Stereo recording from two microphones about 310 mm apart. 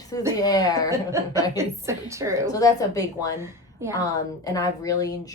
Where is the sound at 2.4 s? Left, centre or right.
Centre.